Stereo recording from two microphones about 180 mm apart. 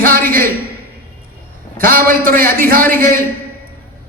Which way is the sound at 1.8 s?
55° right (ahead or behind).